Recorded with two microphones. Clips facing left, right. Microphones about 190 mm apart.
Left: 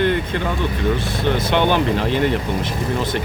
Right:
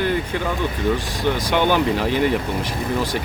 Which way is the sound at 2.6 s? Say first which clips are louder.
Left 1 dB; 10° right (ahead or behind).